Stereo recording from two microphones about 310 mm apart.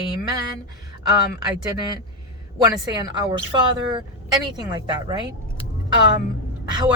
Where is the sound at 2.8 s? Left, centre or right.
Centre.